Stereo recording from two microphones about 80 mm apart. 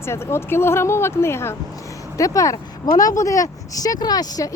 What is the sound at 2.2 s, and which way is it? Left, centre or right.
Speech, left.